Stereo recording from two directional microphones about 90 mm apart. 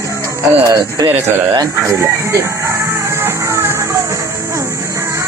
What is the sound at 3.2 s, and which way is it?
Music, 30° right (ahead or behind).